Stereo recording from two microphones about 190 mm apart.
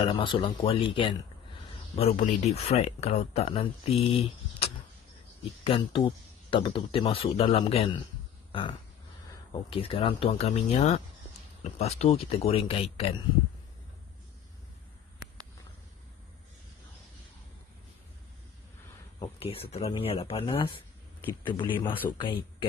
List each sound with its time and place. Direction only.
0.1 s speech: 25° left (ahead or behind)
8.5 s dog: 25° left (ahead or behind)
9.5 s speech: 30° left (ahead or behind)
19.4 s speech: 30° left (ahead or behind)
21.7 s speech: 10° left (ahead or behind)